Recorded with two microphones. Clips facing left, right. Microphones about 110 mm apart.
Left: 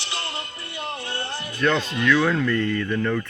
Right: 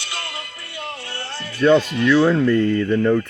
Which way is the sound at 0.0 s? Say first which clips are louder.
Even; 25° left (ahead or behind).